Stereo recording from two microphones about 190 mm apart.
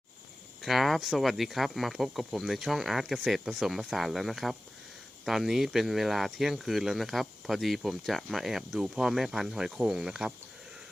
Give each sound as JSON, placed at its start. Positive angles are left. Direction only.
{"t": 0.6, "sound": "speech", "side_deg": 0}